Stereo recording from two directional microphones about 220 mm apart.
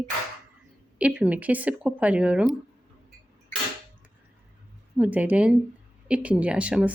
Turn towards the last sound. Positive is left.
turn(degrees=-5)  # may be behind; listen again after turning